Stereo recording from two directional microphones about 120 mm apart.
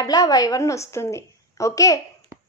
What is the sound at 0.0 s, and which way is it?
A woman's voice, 30° left (ahead or behind).